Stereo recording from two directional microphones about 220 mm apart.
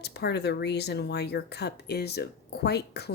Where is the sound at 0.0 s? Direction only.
50° left (ahead or behind).